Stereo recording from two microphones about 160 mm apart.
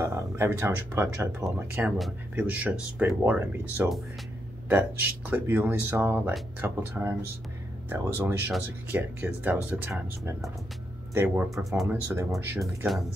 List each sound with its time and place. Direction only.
0.0 s speech: 15° right (ahead or behind)
2.0 s speech: centre (ahead or behind)
11.5 s speech: centre (ahead or behind)
11.9 s speech: 15° right (ahead or behind)